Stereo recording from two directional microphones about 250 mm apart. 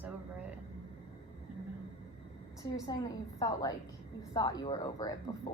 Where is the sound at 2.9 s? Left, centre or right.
Centre.